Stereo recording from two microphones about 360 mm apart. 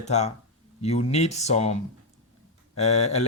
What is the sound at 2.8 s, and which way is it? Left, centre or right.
Speech, centre.